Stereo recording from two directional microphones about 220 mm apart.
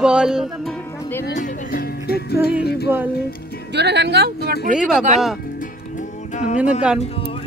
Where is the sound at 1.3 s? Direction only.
40° left (ahead or behind).